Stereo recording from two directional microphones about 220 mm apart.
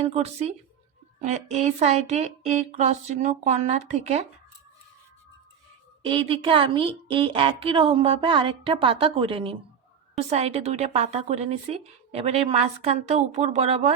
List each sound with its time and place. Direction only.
0.1 s a woman's voice: 30° right (ahead or behind)
6.1 s a woman's voice: 25° right (ahead or behind)